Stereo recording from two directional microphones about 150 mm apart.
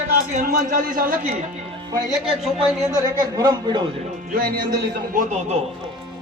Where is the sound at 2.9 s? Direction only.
25° right (ahead or behind).